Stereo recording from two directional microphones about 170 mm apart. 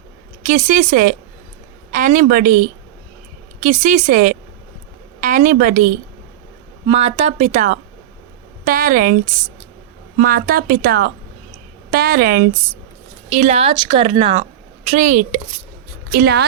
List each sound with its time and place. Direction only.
0.4 s a woman's voice: 45° right (ahead or behind)
6.8 s speech: 35° right (ahead or behind); by 9.1 s 55° right (ahead or behind)
10.2 s speech: 55° right (ahead or behind)
13.3 s speech: 40° right (ahead or behind)
14.8 s a woman's voice: 45° right (ahead or behind)
16.1 s a woman's voice: 75° right (ahead or behind)